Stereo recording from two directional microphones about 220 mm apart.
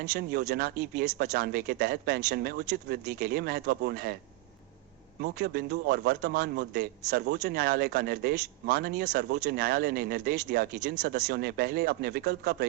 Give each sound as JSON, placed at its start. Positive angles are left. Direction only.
{"t": 0.0, "sound": "speech", "side_deg": -50}
{"t": 5.2, "sound": "speech", "side_deg": -45}